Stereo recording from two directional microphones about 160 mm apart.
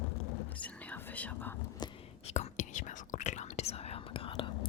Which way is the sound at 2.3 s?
50° left (ahead or behind).